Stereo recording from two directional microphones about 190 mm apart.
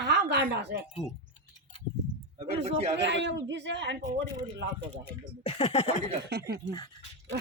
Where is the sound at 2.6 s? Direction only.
35° right (ahead or behind).